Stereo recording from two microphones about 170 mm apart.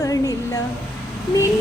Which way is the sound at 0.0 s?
20° left (ahead or behind).